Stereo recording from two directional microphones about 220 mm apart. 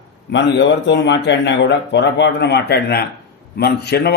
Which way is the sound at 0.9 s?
55° left (ahead or behind).